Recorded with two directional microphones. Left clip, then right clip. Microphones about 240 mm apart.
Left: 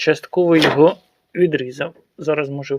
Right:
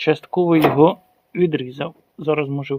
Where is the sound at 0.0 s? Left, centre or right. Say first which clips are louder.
Left 2 dB; centre.